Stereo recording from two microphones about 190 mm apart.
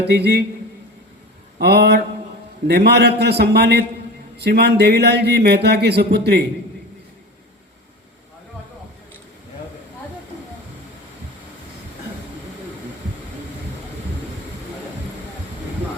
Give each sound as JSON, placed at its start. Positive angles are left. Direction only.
{"t": 0.0, "sound": "speech", "side_deg": -60}
{"t": 1.5, "sound": "speech", "side_deg": -60}